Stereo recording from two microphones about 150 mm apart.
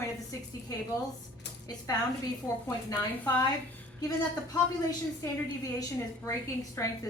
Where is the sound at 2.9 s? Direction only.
10° left (ahead or behind).